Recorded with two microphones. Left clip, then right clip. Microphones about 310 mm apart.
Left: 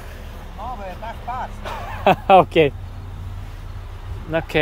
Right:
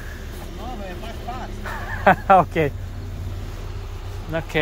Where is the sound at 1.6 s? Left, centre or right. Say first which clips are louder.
Right 2 dB; left.